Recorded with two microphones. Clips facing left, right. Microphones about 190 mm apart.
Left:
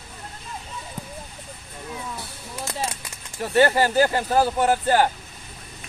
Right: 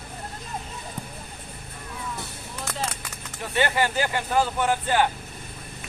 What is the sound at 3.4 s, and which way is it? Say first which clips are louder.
Speech: left 6 dB; 40° left (ahead or behind).